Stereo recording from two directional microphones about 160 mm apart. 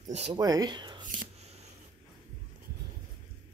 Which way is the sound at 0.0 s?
45° right (ahead or behind).